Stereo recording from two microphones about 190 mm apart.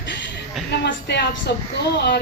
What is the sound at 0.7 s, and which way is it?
A woman's voice, 65° left (ahead or behind).